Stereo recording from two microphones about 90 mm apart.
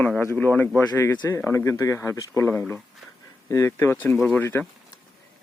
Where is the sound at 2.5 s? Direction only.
20° left (ahead or behind).